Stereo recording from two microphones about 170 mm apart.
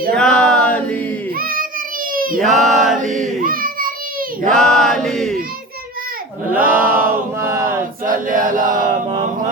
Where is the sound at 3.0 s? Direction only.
50° right (ahead or behind).